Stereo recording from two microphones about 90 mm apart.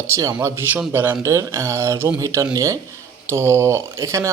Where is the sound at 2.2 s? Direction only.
40° right (ahead or behind).